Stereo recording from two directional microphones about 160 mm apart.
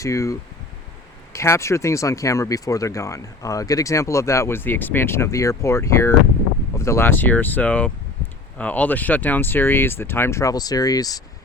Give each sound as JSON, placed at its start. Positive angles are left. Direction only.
{"t": 0.0, "sound": "speech", "side_deg": 20}